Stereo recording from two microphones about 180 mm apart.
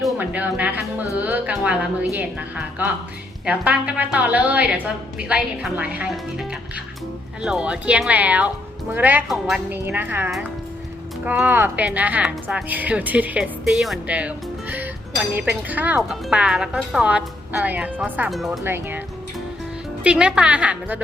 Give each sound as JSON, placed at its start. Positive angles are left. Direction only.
{"t": 0.2, "sound": "speech", "side_deg": -10}
{"t": 18.6, "sound": "speech", "side_deg": -10}
{"t": 20.1, "sound": "speech", "side_deg": -5}